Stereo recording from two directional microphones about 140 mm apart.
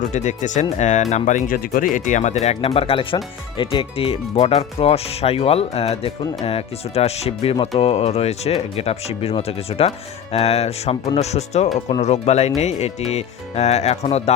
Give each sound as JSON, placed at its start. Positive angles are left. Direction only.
{"t": 0.1, "sound": "speech", "side_deg": 60}